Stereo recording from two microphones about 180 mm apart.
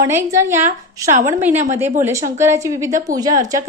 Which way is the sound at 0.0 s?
15° right (ahead or behind).